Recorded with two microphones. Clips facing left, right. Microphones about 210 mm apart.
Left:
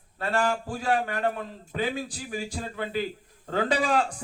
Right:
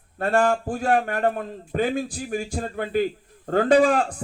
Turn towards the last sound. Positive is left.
turn(degrees=-50)  # may be behind; listen again after turning